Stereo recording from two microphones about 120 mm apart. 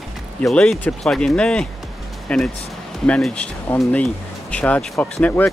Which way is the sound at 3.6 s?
20° left (ahead or behind).